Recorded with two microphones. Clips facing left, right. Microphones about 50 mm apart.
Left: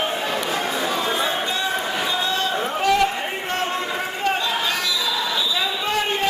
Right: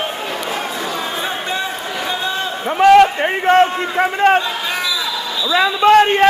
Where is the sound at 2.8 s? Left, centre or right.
Right.